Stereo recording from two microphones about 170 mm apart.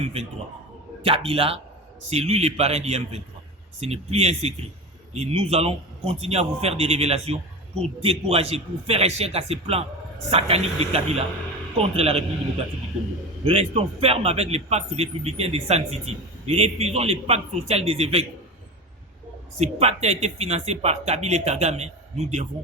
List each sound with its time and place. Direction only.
0.0 s a man's voice: 35° right (ahead or behind)
13.4 s a man's voice: 35° right (ahead or behind)
19.5 s a man's voice: 40° right (ahead or behind)